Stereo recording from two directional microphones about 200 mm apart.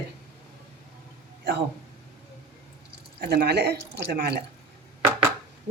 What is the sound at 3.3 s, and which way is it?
A woman's voice, 55° right (ahead or behind).